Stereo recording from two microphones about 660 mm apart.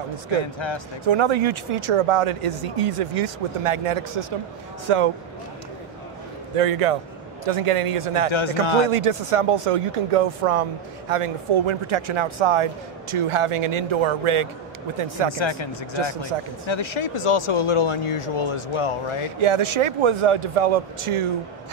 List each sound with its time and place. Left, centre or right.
1.0 s speech: right
6.5 s speech: right
8.3 s speech: left
8.9 s speech: right
15.3 s speech: left
19.4 s speech: right